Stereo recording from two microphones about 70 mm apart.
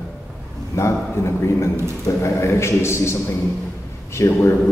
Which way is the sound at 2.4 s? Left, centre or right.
Left.